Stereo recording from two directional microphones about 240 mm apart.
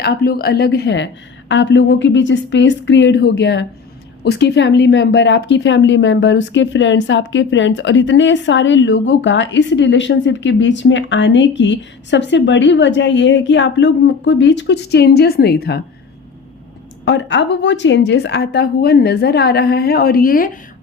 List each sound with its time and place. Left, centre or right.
0.0 s speech: left
17.1 s speech: left